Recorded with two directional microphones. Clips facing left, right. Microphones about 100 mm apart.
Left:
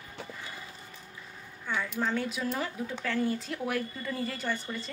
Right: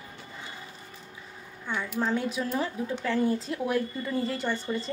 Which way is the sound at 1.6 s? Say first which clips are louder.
Right 1 dB; 20° right (ahead or behind).